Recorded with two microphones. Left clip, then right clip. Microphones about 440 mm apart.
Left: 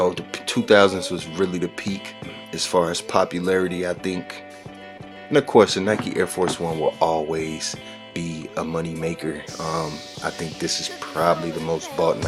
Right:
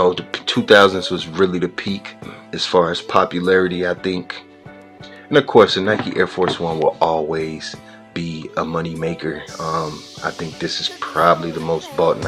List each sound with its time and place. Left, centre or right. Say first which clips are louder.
0.0 s speech: right 5 dB; left